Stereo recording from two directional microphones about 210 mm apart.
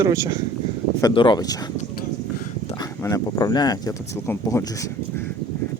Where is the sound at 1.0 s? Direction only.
25° left (ahead or behind).